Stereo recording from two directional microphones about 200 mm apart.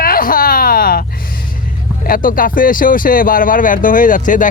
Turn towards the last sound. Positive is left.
turn(degrees=40)  # may be behind; listen again after turning